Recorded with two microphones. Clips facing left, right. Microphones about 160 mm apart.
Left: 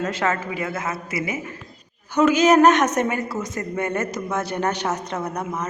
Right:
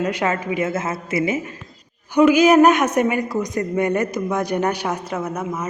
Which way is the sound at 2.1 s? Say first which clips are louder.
Right 3 dB; 10° right (ahead or behind).